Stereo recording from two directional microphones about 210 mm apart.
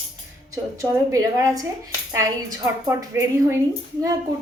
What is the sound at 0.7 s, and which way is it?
Speech, 15° right (ahead or behind).